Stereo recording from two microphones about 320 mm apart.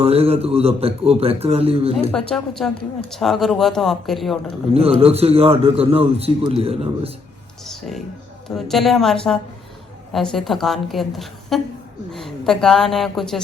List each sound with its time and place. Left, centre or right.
0.0 s a man's voice: centre
2.3 s a woman's voice: centre
4.7 s a man's voice: centre
7.7 s a woman's voice: centre